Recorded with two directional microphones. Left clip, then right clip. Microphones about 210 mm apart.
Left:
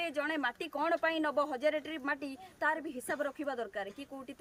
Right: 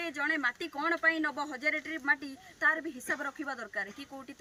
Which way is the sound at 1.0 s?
10° left (ahead or behind).